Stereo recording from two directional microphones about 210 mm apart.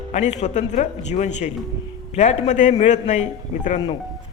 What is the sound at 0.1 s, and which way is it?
Speech, 30° left (ahead or behind).